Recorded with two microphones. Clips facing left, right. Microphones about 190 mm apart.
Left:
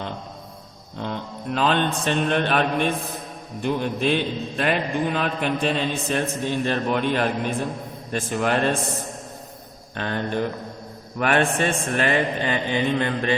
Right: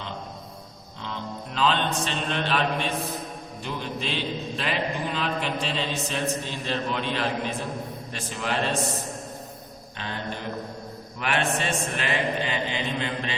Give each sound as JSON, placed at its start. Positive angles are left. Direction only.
{"t": 0.9, "sound": "mantra", "side_deg": 55}
{"t": 3.6, "sound": "a man's voice", "side_deg": 55}
{"t": 10.0, "sound": "a man's voice", "side_deg": 55}